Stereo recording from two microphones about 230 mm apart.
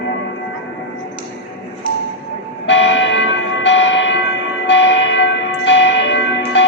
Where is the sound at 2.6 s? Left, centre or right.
Left.